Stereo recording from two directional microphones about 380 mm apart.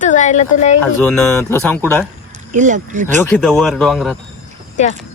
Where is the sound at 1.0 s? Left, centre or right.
Centre.